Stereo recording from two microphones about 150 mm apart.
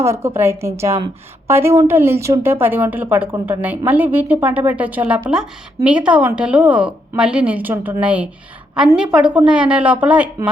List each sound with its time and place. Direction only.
0.0 s a woman's voice: 15° right (ahead or behind)